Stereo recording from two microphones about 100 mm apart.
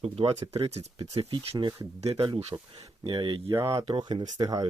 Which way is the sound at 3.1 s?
55° right (ahead or behind).